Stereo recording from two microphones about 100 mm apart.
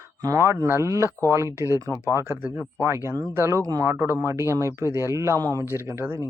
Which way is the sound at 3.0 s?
35° right (ahead or behind).